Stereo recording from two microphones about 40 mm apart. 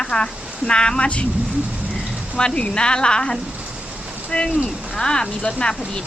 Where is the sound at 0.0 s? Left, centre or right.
Left.